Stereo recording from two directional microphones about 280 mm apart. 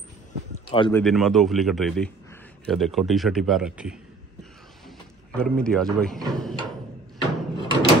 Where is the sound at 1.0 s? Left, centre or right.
Centre.